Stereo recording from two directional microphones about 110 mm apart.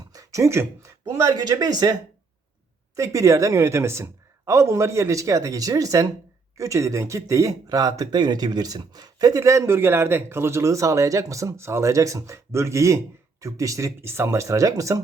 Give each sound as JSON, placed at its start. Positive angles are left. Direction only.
{"t": 0.1, "sound": "speech", "side_deg": -30}